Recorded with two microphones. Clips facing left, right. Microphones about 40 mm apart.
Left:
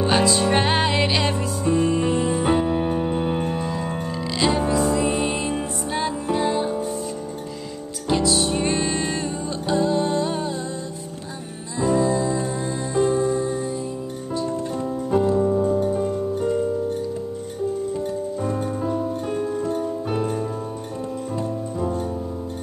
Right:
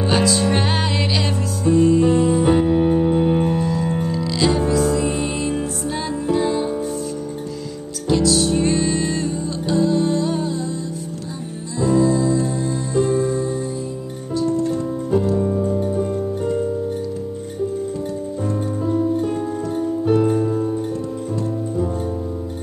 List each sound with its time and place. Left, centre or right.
0.0 s music: centre
8.1 s music: centre
11.8 s music: centre
18.6 s music: centre
18.9 s music: centre
20.2 s music: centre
21.4 s music: centre